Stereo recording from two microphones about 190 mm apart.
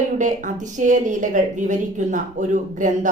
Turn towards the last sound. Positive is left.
turn(degrees=-40)  # may be behind; listen again after turning